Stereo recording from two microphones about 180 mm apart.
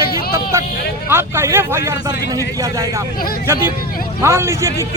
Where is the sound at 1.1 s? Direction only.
15° right (ahead or behind).